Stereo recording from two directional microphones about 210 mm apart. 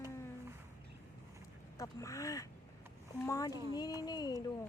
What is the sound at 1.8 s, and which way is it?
Speech, 15° left (ahead or behind).